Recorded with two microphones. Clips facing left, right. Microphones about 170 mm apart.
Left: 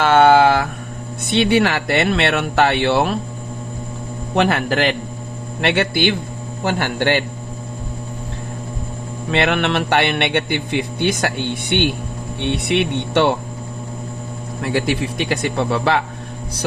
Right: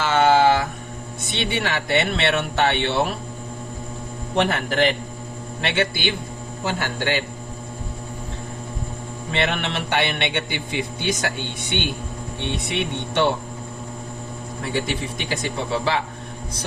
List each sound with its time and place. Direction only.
0.0 s a sound: 60° left (ahead or behind)
1.3 s a man's voice: 65° left (ahead or behind)
4.4 s speech: 75° left (ahead or behind)
5.5 s a man's voice: 60° left (ahead or behind)
9.3 s a man's voice: 70° left (ahead or behind)
12.5 s speech: 70° left (ahead or behind)
14.7 s a man's voice: 65° left (ahead or behind)